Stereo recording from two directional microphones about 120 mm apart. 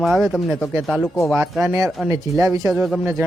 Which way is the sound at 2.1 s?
25° right (ahead or behind).